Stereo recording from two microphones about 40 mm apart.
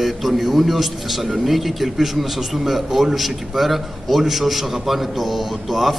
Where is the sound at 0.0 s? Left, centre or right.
Centre.